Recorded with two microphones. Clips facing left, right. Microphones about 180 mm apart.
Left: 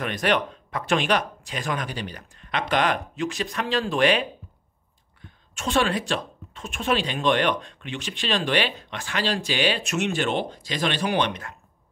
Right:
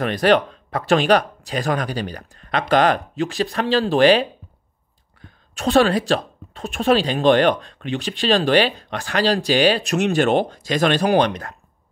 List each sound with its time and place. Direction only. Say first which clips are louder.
0.0 s a woman's voice: right 7 dB; 35° right (ahead or behind)
5.5 s a woman's voice: right 7 dB; 35° right (ahead or behind)